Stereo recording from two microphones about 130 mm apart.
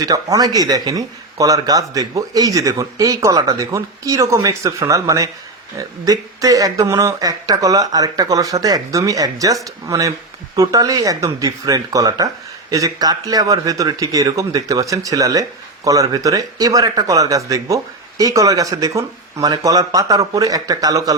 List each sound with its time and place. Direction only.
0.0 s a man's voice: 25° right (ahead or behind)